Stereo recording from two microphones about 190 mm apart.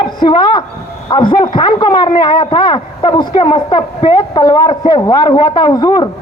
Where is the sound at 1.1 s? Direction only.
25° left (ahead or behind).